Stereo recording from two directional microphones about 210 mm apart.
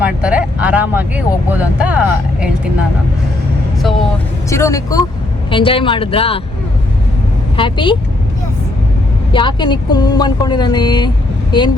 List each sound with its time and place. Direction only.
0.0 s speech: 5° right (ahead or behind)
4.4 s speech: 15° left (ahead or behind)
7.5 s speech: 25° left (ahead or behind)
9.3 s speech: 20° left (ahead or behind)